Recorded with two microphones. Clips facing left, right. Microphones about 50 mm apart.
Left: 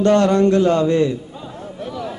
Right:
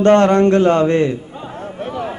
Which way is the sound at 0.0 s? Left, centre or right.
Right.